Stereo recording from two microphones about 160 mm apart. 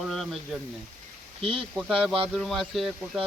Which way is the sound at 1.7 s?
Centre (ahead or behind).